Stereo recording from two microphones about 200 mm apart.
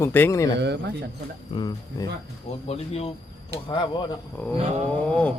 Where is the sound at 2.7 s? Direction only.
30° left (ahead or behind).